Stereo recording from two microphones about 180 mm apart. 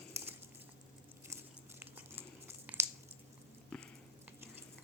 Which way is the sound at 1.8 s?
10° right (ahead or behind).